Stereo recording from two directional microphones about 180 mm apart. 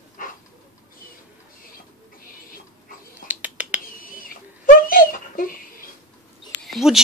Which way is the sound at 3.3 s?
10° right (ahead or behind).